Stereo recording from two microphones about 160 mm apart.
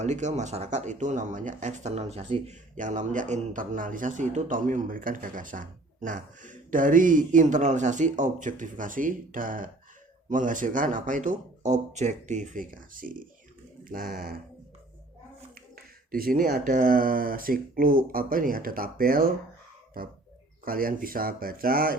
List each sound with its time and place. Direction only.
0.0 s speech: 50° right (ahead or behind); by 14.3 s 65° right (ahead or behind)
15.5 s speech: 65° right (ahead or behind)